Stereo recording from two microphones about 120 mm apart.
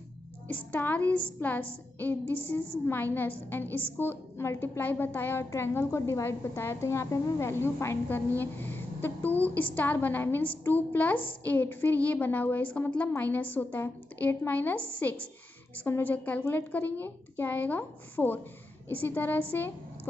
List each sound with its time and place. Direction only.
0.5 s a woman's voice: 15° left (ahead or behind)